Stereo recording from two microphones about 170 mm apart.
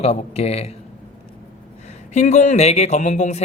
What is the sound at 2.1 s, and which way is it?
Speech, 45° left (ahead or behind).